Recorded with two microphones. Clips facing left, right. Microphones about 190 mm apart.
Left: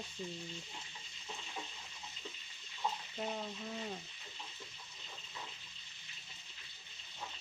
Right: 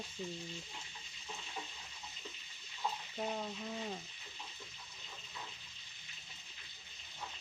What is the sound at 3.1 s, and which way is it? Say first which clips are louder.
Speech: right 1 dB; 5° right (ahead or behind).